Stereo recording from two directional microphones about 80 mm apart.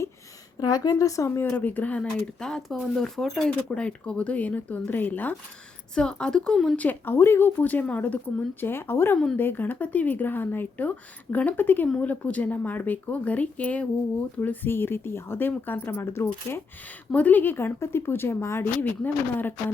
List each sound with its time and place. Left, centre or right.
0.6 s a woman's voice: left
1.5 s a woman's voice: centre
5.9 s speech: centre
6.7 s a woman's voice: left
17.1 s a woman's voice: centre